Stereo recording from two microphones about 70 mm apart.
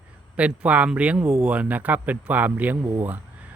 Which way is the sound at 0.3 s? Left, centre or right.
Centre.